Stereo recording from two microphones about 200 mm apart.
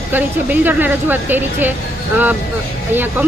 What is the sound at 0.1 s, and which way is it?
Speech, 10° right (ahead or behind).